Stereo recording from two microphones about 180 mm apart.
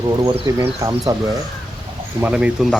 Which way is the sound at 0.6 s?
20° right (ahead or behind).